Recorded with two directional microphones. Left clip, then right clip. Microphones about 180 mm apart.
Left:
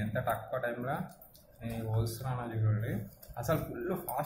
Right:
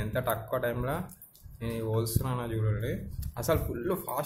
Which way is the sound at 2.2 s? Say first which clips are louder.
Right 5 dB; 45° right (ahead or behind).